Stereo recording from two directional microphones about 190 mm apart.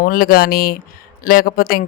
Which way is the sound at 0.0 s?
50° left (ahead or behind).